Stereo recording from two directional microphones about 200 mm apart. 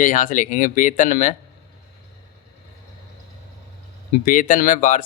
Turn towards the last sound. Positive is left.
turn(degrees=40)  # may be behind; listen again after turning